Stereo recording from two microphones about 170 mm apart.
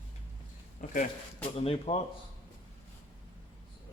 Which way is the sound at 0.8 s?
55° left (ahead or behind).